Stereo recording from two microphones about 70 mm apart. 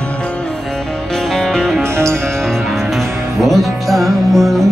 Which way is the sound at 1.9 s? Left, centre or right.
Right.